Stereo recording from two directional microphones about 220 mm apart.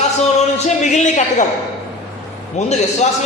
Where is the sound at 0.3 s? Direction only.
30° left (ahead or behind).